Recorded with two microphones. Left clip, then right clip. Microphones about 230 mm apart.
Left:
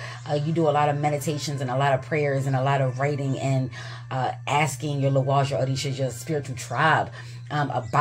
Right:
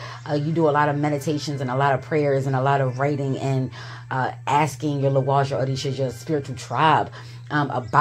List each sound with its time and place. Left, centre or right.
0.3 s speech: centre